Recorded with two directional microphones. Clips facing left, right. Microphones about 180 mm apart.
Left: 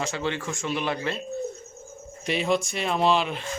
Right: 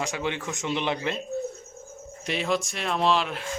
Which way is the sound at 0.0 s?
15° right (ahead or behind).